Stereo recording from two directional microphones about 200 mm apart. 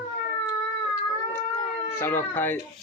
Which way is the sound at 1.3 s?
10° left (ahead or behind).